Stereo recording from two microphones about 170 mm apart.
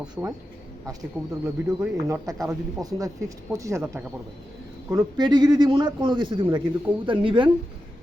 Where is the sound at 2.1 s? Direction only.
20° right (ahead or behind).